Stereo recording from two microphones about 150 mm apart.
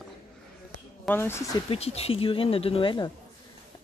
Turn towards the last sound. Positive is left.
turn(degrees=30)  # may be behind; listen again after turning